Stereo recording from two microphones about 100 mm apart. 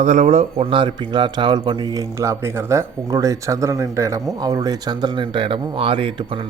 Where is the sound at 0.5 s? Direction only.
65° right (ahead or behind).